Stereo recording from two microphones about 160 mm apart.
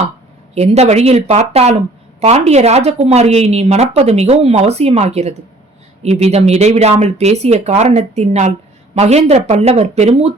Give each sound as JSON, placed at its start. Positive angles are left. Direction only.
{"t": 0.5, "sound": "a woman's voice", "side_deg": -40}